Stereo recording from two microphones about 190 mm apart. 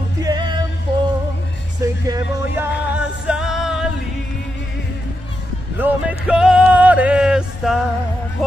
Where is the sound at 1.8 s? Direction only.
15° right (ahead or behind); by 3.8 s centre (ahead or behind).